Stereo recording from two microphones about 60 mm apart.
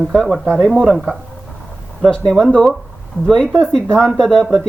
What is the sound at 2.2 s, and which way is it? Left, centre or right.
Speech, centre.